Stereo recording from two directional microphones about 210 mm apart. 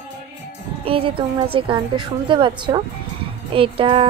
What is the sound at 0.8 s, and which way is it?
A woman's voice, 25° right (ahead or behind).